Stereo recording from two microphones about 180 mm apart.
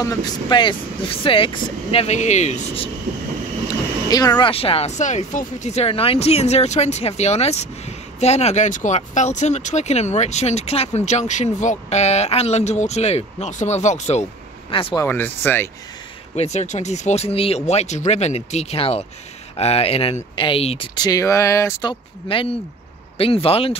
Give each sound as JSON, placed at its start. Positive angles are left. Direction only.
{"t": 0.0, "sound": "speech", "side_deg": 20}
{"t": 3.6, "sound": "speech", "side_deg": 20}
{"t": 15.0, "sound": "speech", "side_deg": 10}
{"t": 16.3, "sound": "speech", "side_deg": 40}
{"t": 22.3, "sound": "speech", "side_deg": 30}